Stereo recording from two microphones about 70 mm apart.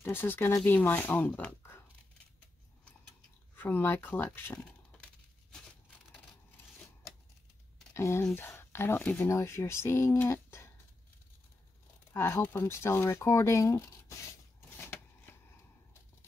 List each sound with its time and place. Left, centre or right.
0.0 s speech: left
3.5 s speech: left
4.6 s a sound: centre
7.9 s speech: left
9.0 s speech: left
9.3 s speech: left
10.2 s a sound: left
12.1 s speech: left
14.8 s shuffling cards: left